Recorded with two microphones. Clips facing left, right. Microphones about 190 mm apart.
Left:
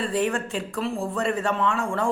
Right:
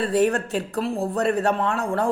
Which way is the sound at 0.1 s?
40° right (ahead or behind).